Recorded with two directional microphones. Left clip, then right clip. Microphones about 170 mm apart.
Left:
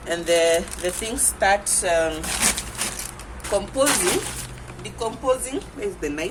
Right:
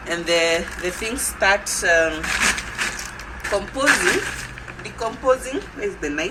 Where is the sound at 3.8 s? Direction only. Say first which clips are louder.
Right 5 dB; 90° left.